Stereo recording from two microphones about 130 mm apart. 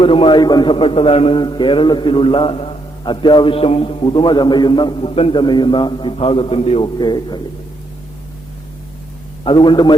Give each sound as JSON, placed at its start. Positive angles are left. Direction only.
{"t": 0.0, "sound": "a man's voice", "side_deg": 45}
{"t": 6.8, "sound": "a man's voice", "side_deg": 35}
{"t": 9.4, "sound": "a man's voice", "side_deg": 40}